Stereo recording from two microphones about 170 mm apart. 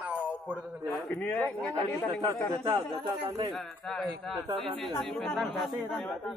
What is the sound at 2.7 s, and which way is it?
Speech, 30° right (ahead or behind).